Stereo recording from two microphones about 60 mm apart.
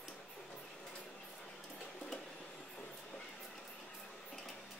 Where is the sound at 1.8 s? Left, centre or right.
Centre.